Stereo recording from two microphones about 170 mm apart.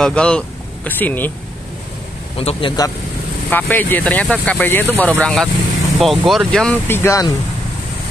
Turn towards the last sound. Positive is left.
turn(degrees=20)  # may be behind; listen again after turning